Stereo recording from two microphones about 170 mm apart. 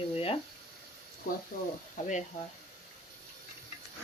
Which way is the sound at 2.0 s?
45° left (ahead or behind).